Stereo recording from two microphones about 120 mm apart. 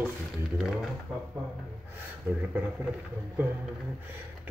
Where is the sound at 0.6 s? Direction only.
Centre (ahead or behind).